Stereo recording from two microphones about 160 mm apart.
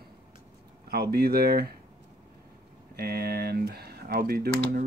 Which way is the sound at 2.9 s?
75° right (ahead or behind).